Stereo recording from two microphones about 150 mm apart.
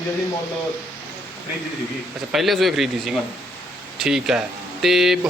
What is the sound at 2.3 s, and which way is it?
Speech, centre (ahead or behind).